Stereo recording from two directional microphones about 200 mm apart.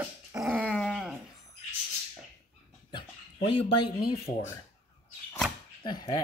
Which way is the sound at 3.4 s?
25° left (ahead or behind).